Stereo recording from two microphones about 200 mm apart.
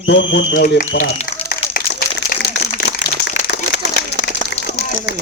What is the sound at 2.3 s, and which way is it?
Crumpling, 45° left (ahead or behind).